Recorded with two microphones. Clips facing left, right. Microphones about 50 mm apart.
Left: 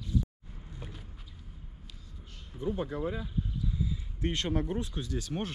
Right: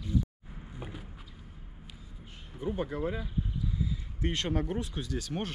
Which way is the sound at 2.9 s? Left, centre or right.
Right.